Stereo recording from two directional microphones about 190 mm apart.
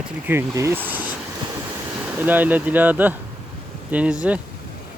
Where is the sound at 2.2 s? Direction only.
10° right (ahead or behind).